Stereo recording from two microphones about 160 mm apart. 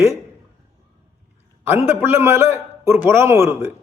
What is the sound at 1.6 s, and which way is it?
A man's voice, 15° right (ahead or behind).